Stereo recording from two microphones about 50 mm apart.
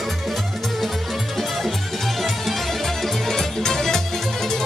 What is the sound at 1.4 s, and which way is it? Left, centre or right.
Music, centre.